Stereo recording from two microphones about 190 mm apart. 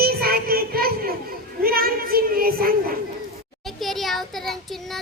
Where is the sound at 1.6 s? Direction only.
50° right (ahead or behind).